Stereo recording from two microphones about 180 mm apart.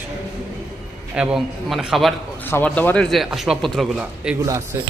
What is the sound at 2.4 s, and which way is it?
A man's voice, 10° left (ahead or behind).